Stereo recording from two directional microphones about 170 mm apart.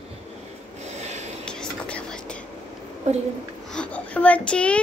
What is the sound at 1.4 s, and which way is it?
Whispering, 5° left (ahead or behind).